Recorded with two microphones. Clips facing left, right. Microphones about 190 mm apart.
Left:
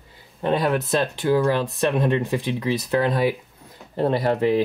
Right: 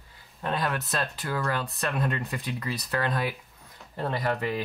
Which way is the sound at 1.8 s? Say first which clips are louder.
Left 10 dB; 25° left (ahead or behind).